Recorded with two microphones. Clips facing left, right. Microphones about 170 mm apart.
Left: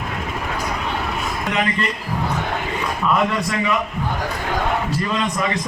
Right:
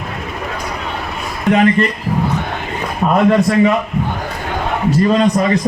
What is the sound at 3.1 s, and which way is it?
Speech, 45° right (ahead or behind).